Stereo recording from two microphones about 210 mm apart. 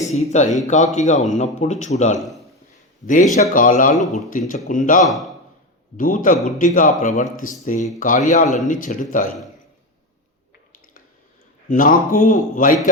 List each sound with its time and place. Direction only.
0.0 s speech: 30° left (ahead or behind)
3.5 s speech: 40° left (ahead or behind)
5.0 s a man's voice: centre (ahead or behind)
6.0 s speech: 40° left (ahead or behind)
11.7 s speech: 40° left (ahead or behind)